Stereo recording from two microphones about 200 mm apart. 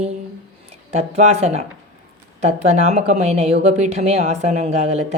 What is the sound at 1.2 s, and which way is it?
A woman's voice, 35° right (ahead or behind).